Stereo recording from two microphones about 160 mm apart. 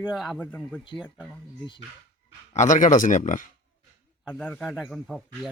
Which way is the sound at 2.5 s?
50° left (ahead or behind).